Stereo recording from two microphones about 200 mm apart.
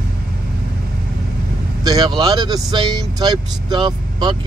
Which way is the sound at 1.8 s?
20° right (ahead or behind).